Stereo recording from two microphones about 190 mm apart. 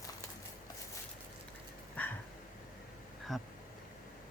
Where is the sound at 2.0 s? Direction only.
10° left (ahead or behind).